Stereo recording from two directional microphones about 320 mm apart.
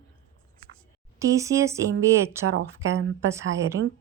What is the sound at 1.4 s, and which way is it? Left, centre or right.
Speech, centre.